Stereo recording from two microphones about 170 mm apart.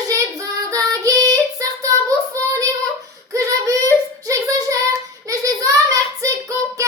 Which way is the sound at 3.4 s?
20° right (ahead or behind).